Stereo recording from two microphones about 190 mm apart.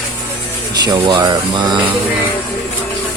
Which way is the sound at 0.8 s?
25° right (ahead or behind).